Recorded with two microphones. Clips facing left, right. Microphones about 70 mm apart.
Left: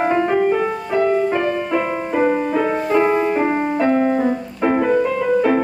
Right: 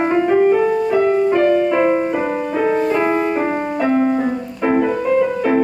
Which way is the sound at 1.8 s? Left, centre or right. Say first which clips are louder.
Right 6 dB; right.